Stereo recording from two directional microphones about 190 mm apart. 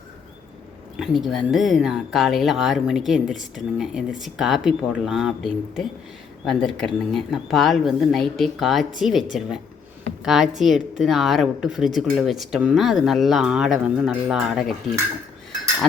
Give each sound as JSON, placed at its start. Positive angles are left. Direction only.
{"t": 0.9, "sound": "speech", "side_deg": 0}
{"t": 10.2, "sound": "speech", "side_deg": 0}